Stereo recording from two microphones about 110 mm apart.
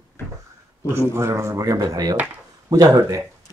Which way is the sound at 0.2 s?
20° left (ahead or behind).